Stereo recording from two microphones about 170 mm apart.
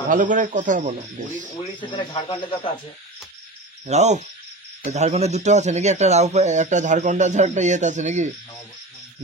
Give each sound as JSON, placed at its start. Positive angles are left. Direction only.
{"t": 0.1, "sound": "speech", "side_deg": -50}
{"t": 1.8, "sound": "speech", "side_deg": 30}
{"t": 3.8, "sound": "speech", "side_deg": -40}